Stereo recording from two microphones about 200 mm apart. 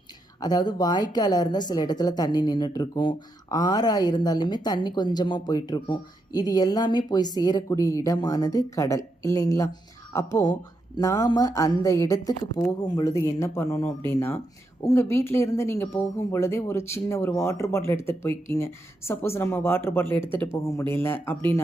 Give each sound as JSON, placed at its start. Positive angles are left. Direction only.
{"t": 0.3, "sound": "speech", "side_deg": 20}